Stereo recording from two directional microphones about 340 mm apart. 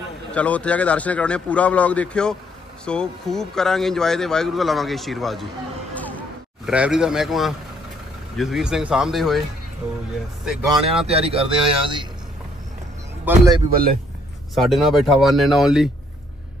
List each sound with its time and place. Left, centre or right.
0.3 s speech: centre
5.9 s a sound: centre
8.4 s speech: centre
11.1 s speech: centre
13.2 s speech: centre
13.7 s speech: right
14.5 s speech: centre